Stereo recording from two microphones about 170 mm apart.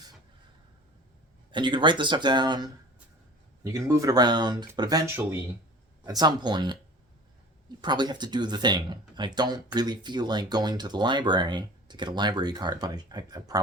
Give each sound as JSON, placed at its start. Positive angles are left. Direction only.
{"t": 1.5, "sound": "speech", "side_deg": -25}
{"t": 7.8, "sound": "speech", "side_deg": -25}